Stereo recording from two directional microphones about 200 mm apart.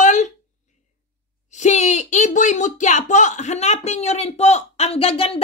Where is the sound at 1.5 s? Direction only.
35° left (ahead or behind).